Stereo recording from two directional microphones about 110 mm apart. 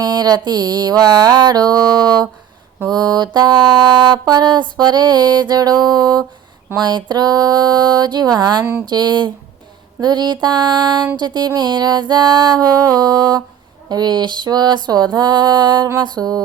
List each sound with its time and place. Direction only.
0.0 s music: 35° right (ahead or behind)